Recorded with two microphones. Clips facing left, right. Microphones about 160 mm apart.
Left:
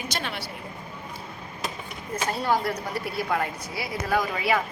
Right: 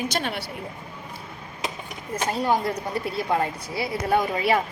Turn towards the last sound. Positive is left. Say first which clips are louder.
# right 3 dB
turn(degrees=-30)  # may be behind; listen again after turning